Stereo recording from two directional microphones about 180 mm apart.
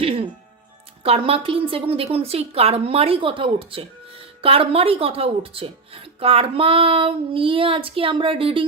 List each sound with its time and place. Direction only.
0.0 s music: 30° right (ahead or behind)
1.0 s speech: 35° right (ahead or behind)